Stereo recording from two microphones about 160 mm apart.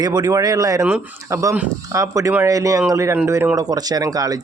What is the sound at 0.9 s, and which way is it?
Speech, 10° right (ahead or behind).